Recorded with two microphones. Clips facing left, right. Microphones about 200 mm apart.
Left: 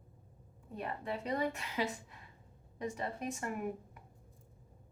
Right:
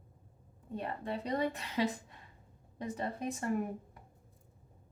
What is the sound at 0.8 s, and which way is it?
A woman's voice, 35° right (ahead or behind).